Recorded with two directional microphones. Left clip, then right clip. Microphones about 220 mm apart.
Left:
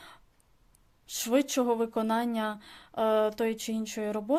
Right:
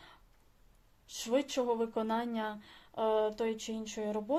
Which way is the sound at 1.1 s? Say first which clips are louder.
Left 5 dB; 35° left (ahead or behind).